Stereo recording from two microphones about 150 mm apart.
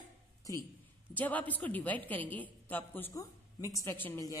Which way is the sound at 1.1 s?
10° left (ahead or behind).